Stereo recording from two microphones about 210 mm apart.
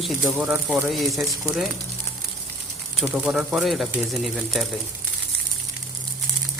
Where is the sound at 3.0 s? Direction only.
5° right (ahead or behind).